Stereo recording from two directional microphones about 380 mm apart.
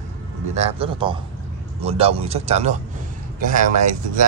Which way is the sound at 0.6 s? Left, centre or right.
Centre.